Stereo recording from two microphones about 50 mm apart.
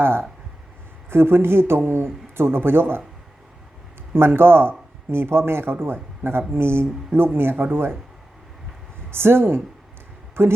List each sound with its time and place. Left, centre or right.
0.0 s speech: right
4.1 s speech: right
9.0 s speech: right